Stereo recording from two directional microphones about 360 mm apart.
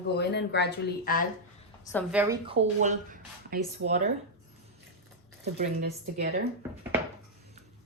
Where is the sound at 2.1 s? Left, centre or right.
Centre.